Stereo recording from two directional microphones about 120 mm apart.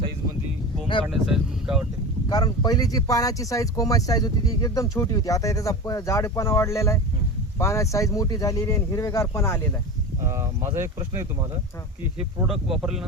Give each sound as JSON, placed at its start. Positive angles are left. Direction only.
{"t": 1.1, "sound": "speech", "side_deg": 0}
{"t": 2.3, "sound": "speech", "side_deg": 30}
{"t": 10.2, "sound": "speech", "side_deg": -25}
{"t": 12.5, "sound": "speech", "side_deg": -5}